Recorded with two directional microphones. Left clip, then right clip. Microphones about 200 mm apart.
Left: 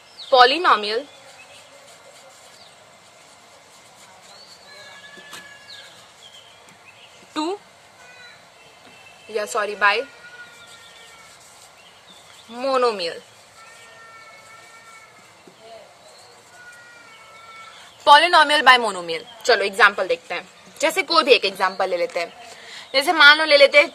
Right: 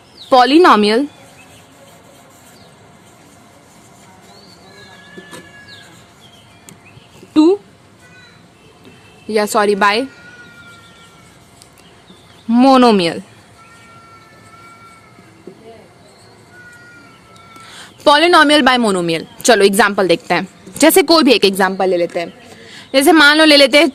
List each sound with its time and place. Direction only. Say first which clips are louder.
0.3 s a woman's voice: right 6 dB; 45° right (ahead or behind)
7.3 s a sound: right 15 dB; 25° right (ahead or behind)
9.3 s a woman's voice: right 10 dB; 45° right (ahead or behind)
12.5 s speech: right 11 dB; 55° right (ahead or behind)
18.0 s a woman's voice: right 3 dB; 35° right (ahead or behind); by 21.5 s 55° right (ahead or behind)
21.6 s a woman's voice: right 7 dB; 25° right (ahead or behind); by 23.9 s 50° right (ahead or behind)